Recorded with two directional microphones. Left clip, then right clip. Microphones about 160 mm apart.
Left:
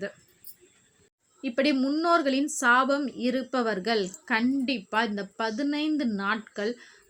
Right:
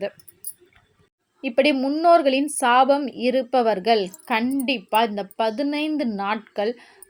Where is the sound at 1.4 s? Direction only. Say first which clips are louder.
Right 6 dB; 30° right (ahead or behind).